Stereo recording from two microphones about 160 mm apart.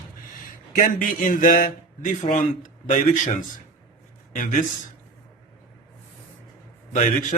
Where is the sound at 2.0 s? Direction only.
50° left (ahead or behind).